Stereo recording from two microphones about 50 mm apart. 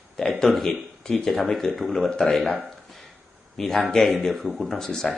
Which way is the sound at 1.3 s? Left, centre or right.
Centre.